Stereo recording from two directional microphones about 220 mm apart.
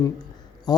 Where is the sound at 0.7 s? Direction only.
20° left (ahead or behind).